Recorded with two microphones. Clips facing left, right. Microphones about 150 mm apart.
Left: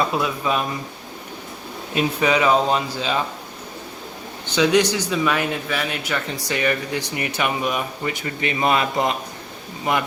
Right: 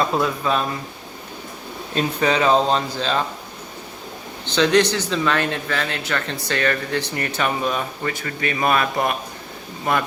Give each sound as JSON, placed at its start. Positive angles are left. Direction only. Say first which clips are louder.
{"t": 0.2, "sound": "a man's voice", "louder": "right 1 dB", "side_deg": 10}
{"t": 2.0, "sound": "a man's voice", "louder": "even", "side_deg": 10}
{"t": 4.4, "sound": "a man's voice", "louder": "right 1 dB", "side_deg": 10}